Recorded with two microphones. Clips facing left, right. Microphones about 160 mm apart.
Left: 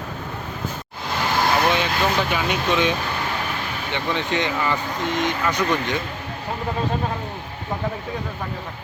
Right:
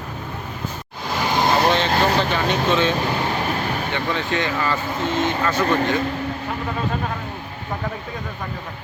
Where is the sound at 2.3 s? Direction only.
10° left (ahead or behind).